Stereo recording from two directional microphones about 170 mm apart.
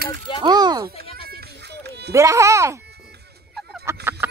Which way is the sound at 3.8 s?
15° right (ahead or behind).